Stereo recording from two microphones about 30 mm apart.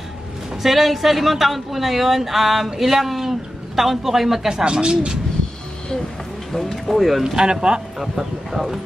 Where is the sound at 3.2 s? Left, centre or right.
Centre.